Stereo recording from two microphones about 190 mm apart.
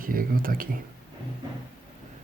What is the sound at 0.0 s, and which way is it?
Speech, 50° right (ahead or behind).